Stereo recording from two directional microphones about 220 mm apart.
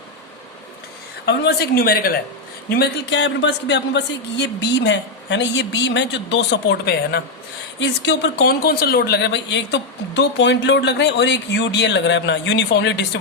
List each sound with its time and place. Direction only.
1.2 s speech: 45° left (ahead or behind)